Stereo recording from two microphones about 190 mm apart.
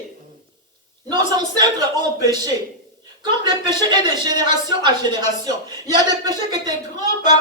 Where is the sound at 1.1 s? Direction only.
20° right (ahead or behind).